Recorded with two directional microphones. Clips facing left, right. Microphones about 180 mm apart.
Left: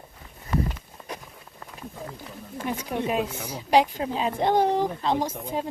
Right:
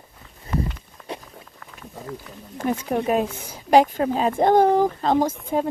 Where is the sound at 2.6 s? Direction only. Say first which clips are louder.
Right 6 dB; 45° right (ahead or behind).